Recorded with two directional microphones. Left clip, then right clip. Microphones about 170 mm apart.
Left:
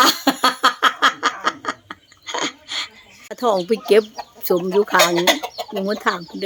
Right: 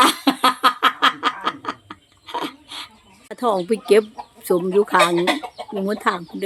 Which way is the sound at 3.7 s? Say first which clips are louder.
Right 1 dB; centre (ahead or behind).